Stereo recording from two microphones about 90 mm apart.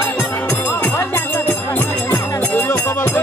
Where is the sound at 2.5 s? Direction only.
25° left (ahead or behind).